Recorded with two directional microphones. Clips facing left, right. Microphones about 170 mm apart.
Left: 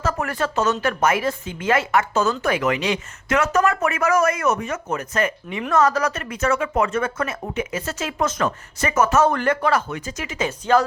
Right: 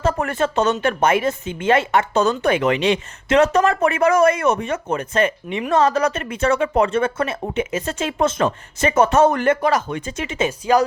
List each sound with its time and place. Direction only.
0.0 s a woman's voice: 25° right (ahead or behind)
9.3 s speech: 20° right (ahead or behind)
9.9 s a woman's voice: 30° right (ahead or behind)